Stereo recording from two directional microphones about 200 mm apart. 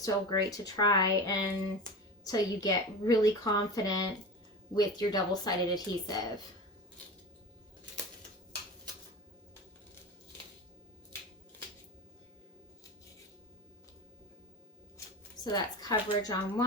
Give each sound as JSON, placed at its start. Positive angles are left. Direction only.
{"t": 0.0, "sound": "a woman's voice", "side_deg": 20}
{"t": 15.0, "sound": "a sound", "side_deg": 15}
{"t": 15.5, "sound": "a woman's voice", "side_deg": 20}